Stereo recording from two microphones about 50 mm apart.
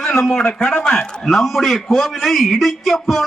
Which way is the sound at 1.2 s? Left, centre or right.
Centre.